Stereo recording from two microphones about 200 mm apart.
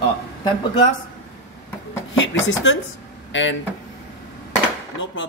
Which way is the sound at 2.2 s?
70° left (ahead or behind).